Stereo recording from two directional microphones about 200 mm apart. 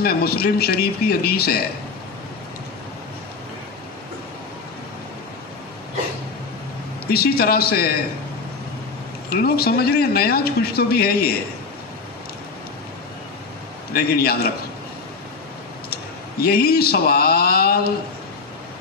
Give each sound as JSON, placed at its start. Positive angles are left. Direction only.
{"t": 0.0, "sound": "a man's voice", "side_deg": 50}
{"t": 7.1, "sound": "a man's voice", "side_deg": 50}
{"t": 9.3, "sound": "a man's voice", "side_deg": 50}
{"t": 13.9, "sound": "a man's voice", "side_deg": 50}
{"t": 15.9, "sound": "a man's voice", "side_deg": 50}